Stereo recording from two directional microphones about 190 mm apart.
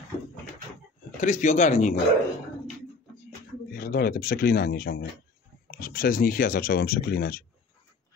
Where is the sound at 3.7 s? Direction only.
50° left (ahead or behind).